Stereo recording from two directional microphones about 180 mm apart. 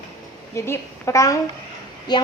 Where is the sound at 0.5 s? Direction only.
15° left (ahead or behind).